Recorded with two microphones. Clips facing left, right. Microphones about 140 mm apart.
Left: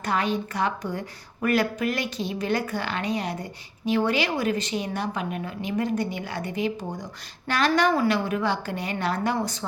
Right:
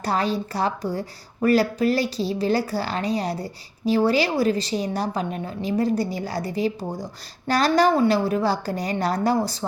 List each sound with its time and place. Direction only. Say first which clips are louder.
0.0 s a woman's voice: right 2 dB; 35° right (ahead or behind)